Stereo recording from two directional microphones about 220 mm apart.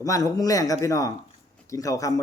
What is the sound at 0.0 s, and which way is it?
Speech, 15° left (ahead or behind).